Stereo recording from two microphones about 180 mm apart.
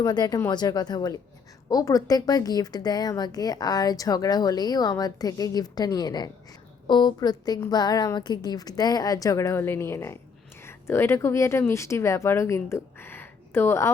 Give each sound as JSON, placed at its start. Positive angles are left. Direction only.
{"t": 0.0, "sound": "a woman's voice", "side_deg": 25}